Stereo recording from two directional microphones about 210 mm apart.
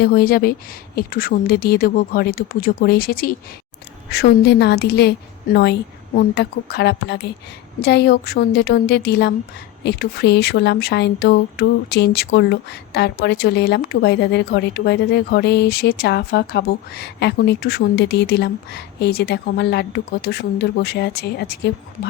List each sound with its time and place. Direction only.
0.0 s speech: 45° left (ahead or behind)
6.1 s speech: 55° left (ahead or behind)